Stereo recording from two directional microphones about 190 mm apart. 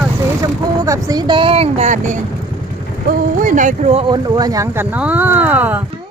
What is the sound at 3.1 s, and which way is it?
Speech, 45° right (ahead or behind).